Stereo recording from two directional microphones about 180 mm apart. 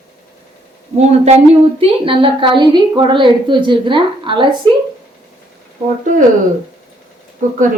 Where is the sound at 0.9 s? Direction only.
35° right (ahead or behind).